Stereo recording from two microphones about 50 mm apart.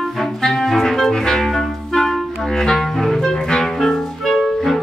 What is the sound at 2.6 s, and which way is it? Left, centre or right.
Clarinet, centre.